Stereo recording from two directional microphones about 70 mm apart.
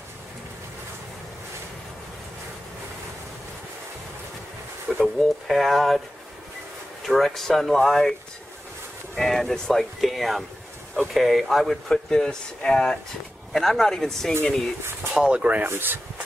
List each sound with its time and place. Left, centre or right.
5.0 s speech: centre
7.1 s speech: centre
9.1 s speech: centre
15.1 s speech: centre
15.6 s speech: right